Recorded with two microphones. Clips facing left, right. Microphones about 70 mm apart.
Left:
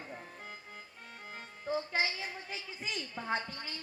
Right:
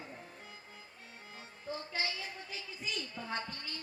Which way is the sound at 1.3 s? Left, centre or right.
Left.